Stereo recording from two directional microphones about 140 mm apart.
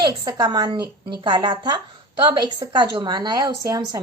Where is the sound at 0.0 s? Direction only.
30° right (ahead or behind).